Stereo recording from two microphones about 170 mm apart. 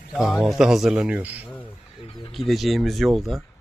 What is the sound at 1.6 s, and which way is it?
Speech, 30° left (ahead or behind).